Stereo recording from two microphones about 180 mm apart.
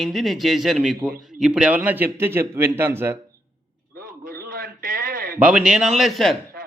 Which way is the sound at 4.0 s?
50° right (ahead or behind).